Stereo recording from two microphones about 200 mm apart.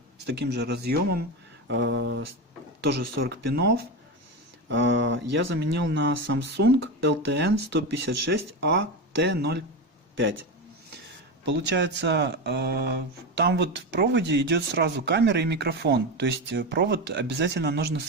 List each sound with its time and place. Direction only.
0.3 s speech: 60° right (ahead or behind)
1.6 s speech: 65° right (ahead or behind)
2.8 s speech: 55° right (ahead or behind)
4.7 s speech: 65° right (ahead or behind)
11.4 s speech: 60° right (ahead or behind)